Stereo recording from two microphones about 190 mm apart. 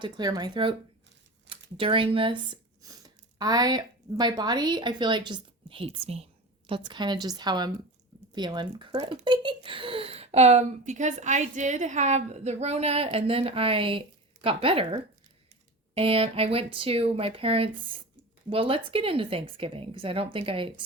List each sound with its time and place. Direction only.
0.0 s speech: 20° right (ahead or behind)
16.0 s speech: 30° right (ahead or behind)